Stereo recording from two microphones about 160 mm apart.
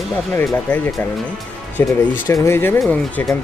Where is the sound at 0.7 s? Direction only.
10° left (ahead or behind).